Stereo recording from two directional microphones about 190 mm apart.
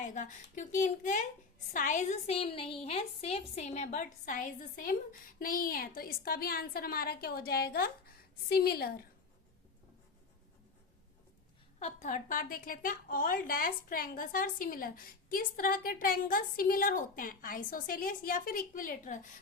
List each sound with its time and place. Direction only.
0.0 s a woman's voice: 45° left (ahead or behind)
11.8 s a woman's voice: 35° left (ahead or behind)